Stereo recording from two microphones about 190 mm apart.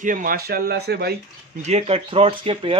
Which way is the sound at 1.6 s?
35° right (ahead or behind).